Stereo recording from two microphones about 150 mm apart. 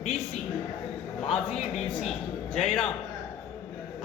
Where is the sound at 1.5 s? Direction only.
40° left (ahead or behind).